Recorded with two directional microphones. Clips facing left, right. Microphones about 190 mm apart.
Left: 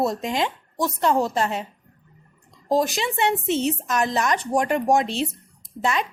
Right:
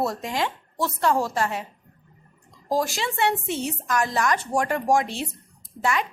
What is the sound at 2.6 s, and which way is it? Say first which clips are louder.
A woman's voice: left 3 dB; 20° left (ahead or behind).